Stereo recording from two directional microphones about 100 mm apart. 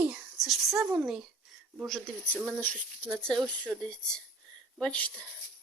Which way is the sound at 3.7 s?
25° right (ahead or behind).